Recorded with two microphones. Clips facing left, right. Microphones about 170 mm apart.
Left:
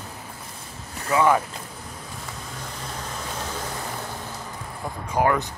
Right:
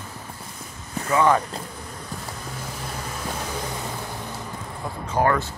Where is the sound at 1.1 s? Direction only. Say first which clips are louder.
Even; 10° left (ahead or behind).